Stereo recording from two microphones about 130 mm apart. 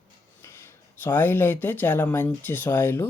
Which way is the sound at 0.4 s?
20° left (ahead or behind).